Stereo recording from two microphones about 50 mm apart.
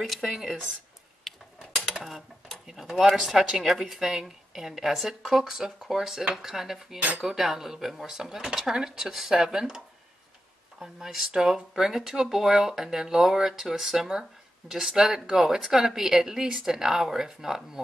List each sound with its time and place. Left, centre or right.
0.0 s speech: centre
1.3 s mechanisms: centre
2.0 s speech: centre
7.0 s cutlery: right
7.2 s speech: centre